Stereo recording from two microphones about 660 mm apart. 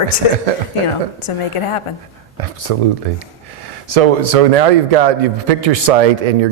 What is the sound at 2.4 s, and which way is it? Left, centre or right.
A man's voice, right.